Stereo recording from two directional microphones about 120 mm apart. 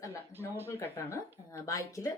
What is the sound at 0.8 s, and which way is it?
Speech, 25° left (ahead or behind).